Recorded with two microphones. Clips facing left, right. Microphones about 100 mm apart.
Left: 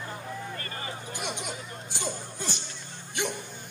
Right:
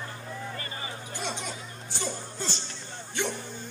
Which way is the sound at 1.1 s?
15° left (ahead or behind).